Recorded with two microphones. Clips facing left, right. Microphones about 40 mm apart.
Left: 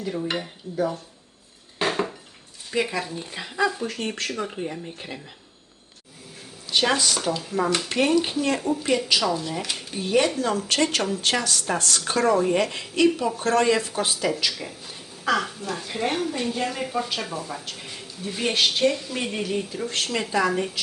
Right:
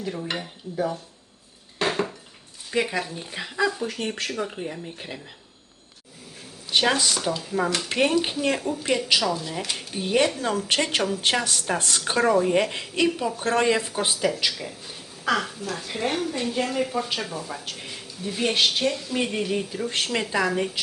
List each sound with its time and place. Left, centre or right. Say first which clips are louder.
0.0 s a woman's voice: left 2 dB; centre
1.8 s dishes: even; centre
3.0 s a woman's voice: even; centre
6.7 s a woman's voice: even; centre
7.9 s a woman's voice: even; centre
13.4 s speech: left 1 dB; centre
14.0 s a woman's voice: even; centre